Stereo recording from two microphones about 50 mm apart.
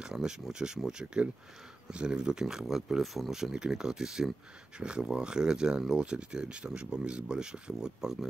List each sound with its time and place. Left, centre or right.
0.0 s speech: centre
3.0 s speech: centre